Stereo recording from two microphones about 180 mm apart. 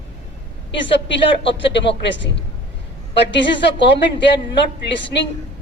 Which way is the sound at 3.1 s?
75° left (ahead or behind).